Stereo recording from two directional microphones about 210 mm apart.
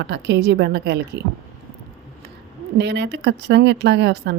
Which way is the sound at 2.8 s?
55° right (ahead or behind).